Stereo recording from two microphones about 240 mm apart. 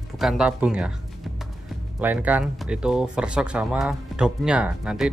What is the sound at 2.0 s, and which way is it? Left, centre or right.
Speech, centre.